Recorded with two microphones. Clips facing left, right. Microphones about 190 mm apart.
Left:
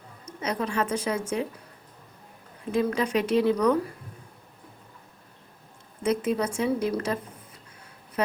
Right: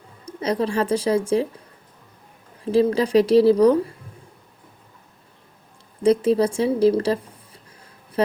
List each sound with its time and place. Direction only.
0.3 s a woman's voice: 30° right (ahead or behind)
2.7 s a woman's voice: 30° right (ahead or behind)
6.0 s a woman's voice: 35° right (ahead or behind)